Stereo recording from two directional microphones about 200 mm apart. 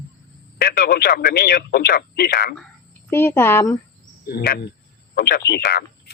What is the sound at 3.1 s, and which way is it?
Speech, 10° left (ahead or behind).